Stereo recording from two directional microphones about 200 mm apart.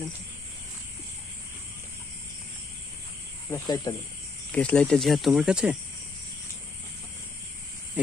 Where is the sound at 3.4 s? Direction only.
15° left (ahead or behind).